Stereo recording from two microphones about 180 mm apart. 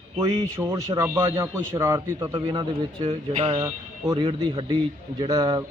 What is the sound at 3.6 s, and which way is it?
Speech, 15° right (ahead or behind).